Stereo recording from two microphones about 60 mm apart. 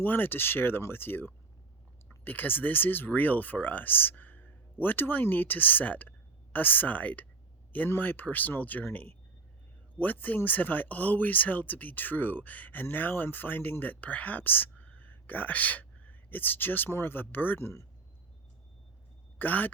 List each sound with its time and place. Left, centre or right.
0.0 s speech: left
17.6 s speech: left
19.4 s speech: left